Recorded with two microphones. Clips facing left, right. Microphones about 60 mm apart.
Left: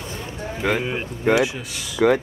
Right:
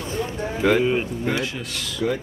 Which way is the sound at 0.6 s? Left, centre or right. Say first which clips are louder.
Right 4 dB; centre.